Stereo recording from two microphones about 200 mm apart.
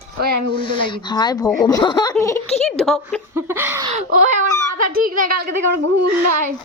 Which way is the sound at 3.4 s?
10° right (ahead or behind).